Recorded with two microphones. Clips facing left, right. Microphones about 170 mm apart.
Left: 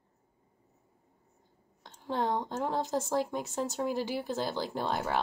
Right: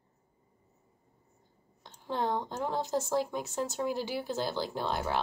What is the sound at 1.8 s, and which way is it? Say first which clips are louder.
A woman's voice: left 1 dB; centre (ahead or behind).